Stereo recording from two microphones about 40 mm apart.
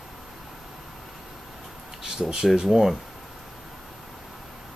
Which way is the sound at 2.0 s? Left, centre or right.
Centre.